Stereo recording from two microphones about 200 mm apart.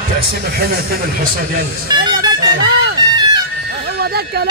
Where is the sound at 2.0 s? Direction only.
55° right (ahead or behind).